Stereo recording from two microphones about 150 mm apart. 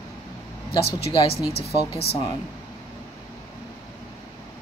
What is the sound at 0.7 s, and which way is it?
Speech, 40° left (ahead or behind).